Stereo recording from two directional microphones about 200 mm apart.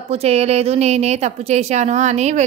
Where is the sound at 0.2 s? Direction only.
30° right (ahead or behind).